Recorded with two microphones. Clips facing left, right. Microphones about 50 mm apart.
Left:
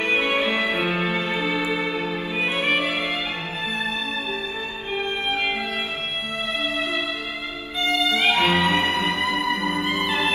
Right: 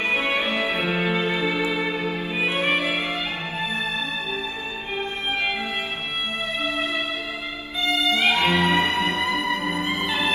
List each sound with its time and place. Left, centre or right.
0.4 s music: left
7.8 s violin: left
9.4 s music: left
9.8 s music: left